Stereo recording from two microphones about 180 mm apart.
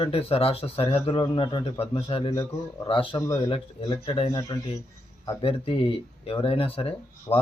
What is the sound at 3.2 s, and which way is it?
Speech, 20° left (ahead or behind).